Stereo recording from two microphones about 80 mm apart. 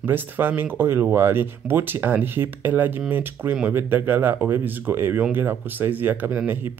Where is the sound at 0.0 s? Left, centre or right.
Right.